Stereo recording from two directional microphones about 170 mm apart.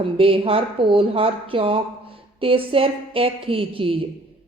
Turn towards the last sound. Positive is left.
turn(degrees=-30)  # may be behind; listen again after turning